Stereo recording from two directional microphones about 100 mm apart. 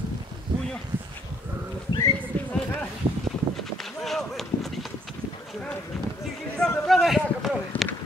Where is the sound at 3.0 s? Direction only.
60° right (ahead or behind).